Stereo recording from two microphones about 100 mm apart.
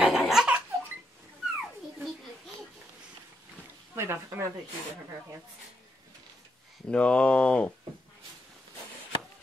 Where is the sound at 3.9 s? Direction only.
25° right (ahead or behind).